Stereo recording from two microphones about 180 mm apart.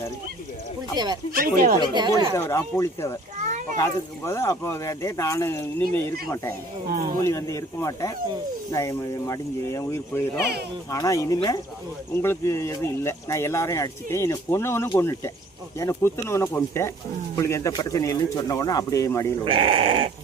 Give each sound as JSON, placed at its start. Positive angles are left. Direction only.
{"t": 0.9, "sound": "speech", "side_deg": -25}
{"t": 1.3, "sound": "speech", "side_deg": -50}
{"t": 1.8, "sound": "speech", "side_deg": -25}
{"t": 2.3, "sound": "speech", "side_deg": 15}
{"t": 6.8, "sound": "speech", "side_deg": -55}
{"t": 7.3, "sound": "speech", "side_deg": 15}
{"t": 19.5, "sound": "speech", "side_deg": -30}